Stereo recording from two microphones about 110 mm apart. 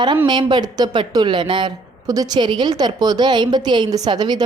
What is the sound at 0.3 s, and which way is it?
Speech, 45° right (ahead or behind).